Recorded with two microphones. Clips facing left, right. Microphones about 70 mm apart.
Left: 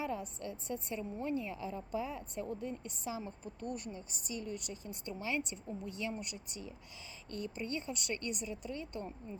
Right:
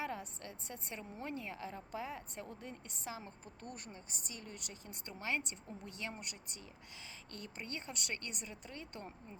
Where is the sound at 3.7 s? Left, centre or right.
Right.